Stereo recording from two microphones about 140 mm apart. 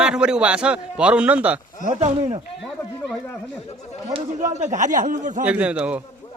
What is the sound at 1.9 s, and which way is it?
Speech, 50° right (ahead or behind).